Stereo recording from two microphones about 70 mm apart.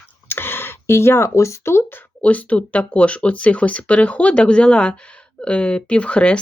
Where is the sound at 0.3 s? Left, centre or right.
Left.